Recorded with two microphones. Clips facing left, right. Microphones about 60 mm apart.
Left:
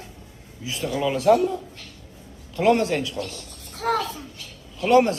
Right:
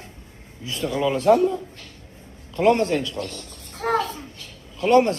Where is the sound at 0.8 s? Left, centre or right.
Right.